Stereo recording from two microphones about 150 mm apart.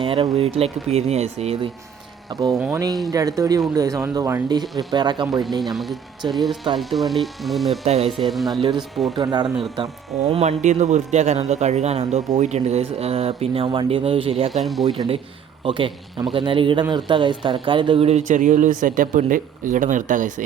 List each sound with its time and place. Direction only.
0.0 s speech: 35° right (ahead or behind)
2.3 s speech: 25° right (ahead or behind)
4.6 s speech: centre (ahead or behind)
4.9 s speech: 30° right (ahead or behind)
5.4 s speech: centre (ahead or behind)
7.9 s speech: 45° right (ahead or behind)
8.1 s speech: centre (ahead or behind)
9.1 s speech: 30° right (ahead or behind)
14.5 s speech: centre (ahead or behind)
14.8 s speech: 35° right (ahead or behind); by 20.4 s 60° right (ahead or behind)